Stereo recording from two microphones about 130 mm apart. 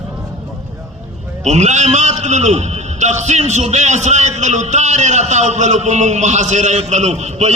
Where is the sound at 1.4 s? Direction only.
60° right (ahead or behind).